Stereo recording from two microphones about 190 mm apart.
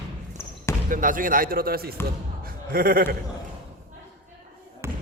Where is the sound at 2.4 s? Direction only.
50° right (ahead or behind).